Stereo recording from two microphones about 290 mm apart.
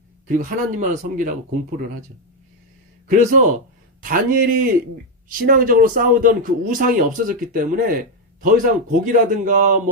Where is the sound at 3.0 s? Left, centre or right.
Right.